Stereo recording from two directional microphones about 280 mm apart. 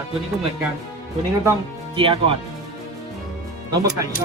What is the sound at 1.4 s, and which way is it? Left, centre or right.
Speech, centre.